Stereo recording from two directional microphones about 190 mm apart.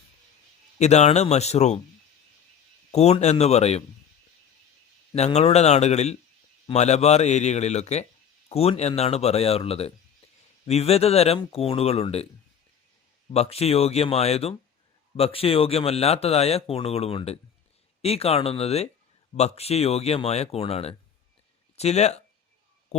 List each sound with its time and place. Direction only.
0.8 s speech: 35° left (ahead or behind)
2.9 s speech: 35° left (ahead or behind)
5.1 s speech: 35° left (ahead or behind)
13.3 s speech: 35° left (ahead or behind)
22.9 s a sound: 35° left (ahead or behind)